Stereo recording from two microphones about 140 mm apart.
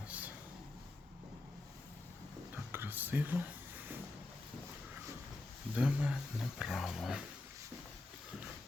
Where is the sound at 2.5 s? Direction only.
15° right (ahead or behind).